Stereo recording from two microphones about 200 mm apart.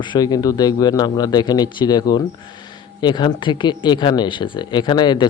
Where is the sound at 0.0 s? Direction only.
20° left (ahead or behind).